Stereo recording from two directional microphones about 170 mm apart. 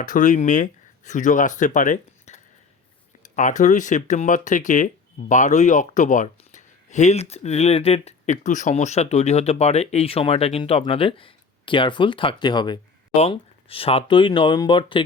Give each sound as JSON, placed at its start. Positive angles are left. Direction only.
{"t": 0.0, "sound": "speech", "side_deg": 50}